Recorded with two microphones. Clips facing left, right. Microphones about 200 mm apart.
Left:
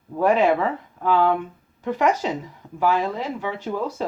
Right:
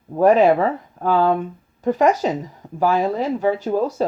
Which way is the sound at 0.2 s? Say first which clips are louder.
Right 5 dB; 40° right (ahead or behind).